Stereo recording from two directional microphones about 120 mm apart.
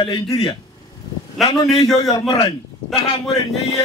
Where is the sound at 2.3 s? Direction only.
50° left (ahead or behind).